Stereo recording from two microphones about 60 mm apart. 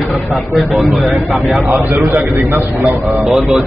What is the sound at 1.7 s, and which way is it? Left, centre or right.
Speech, right.